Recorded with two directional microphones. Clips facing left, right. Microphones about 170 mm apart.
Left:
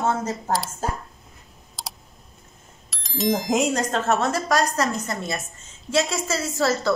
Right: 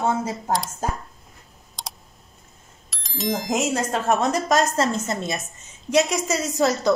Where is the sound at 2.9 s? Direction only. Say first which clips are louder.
Left 3 dB; centre (ahead or behind).